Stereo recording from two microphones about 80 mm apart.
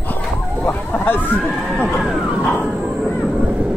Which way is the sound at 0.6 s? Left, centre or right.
Left.